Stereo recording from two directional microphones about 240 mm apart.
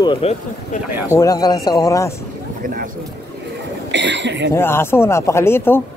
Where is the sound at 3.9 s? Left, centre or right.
Right.